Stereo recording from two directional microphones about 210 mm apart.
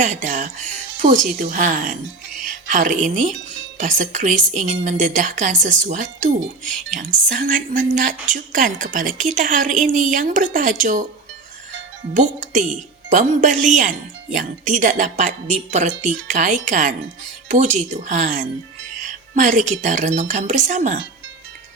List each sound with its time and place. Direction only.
0.0 s a woman's voice: 35° right (ahead or behind)
12.1 s a woman's voice: 35° right (ahead or behind)